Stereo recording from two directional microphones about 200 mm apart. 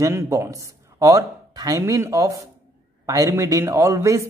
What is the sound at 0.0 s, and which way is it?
A man's voice, 15° right (ahead or behind).